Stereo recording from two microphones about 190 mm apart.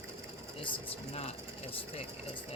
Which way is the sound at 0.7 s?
35° left (ahead or behind).